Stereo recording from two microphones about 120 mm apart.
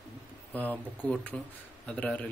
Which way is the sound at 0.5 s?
15° left (ahead or behind).